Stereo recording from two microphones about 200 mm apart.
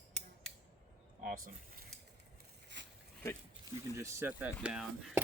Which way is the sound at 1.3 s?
45° right (ahead or behind).